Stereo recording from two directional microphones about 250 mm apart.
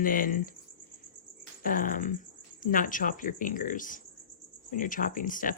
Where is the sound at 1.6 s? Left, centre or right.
Left.